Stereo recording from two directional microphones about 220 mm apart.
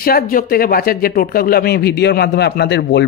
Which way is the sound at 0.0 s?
40° left (ahead or behind).